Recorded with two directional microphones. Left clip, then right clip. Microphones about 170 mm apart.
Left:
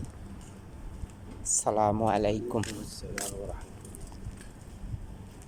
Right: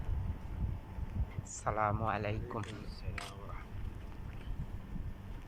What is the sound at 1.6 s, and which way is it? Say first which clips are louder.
Speech: left 7 dB; 40° left (ahead or behind).